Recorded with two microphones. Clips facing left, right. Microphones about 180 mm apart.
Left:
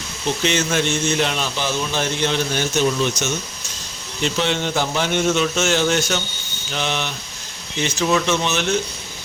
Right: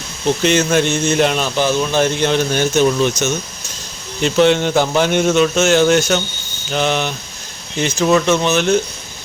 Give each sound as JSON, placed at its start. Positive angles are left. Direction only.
{"t": 0.4, "sound": "speech", "side_deg": -50}